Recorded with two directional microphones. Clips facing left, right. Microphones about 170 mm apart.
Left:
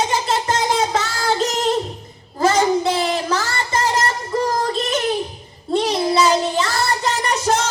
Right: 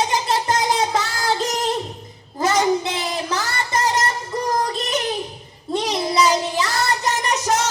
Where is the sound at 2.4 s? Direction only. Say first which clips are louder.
Left 3 dB; 30° left (ahead or behind).